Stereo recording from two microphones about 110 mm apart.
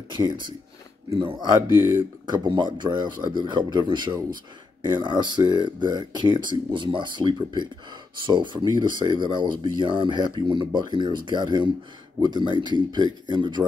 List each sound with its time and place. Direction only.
0.1 s speech: 45° right (ahead or behind)
1.8 s speech: 20° right (ahead or behind)
2.2 s speech: 45° right (ahead or behind)